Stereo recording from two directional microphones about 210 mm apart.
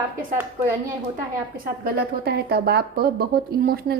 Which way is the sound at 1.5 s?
45° right (ahead or behind).